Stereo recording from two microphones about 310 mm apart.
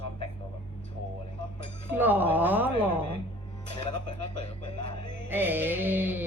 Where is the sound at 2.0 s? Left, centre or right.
Centre.